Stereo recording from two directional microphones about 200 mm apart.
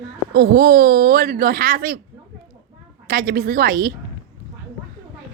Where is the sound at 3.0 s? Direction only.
45° right (ahead or behind).